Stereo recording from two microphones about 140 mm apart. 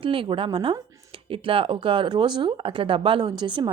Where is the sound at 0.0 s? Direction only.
40° right (ahead or behind).